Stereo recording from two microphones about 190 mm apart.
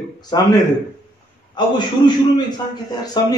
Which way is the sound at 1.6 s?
20° left (ahead or behind).